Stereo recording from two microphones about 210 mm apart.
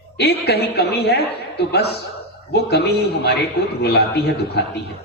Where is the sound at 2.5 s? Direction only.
50° left (ahead or behind).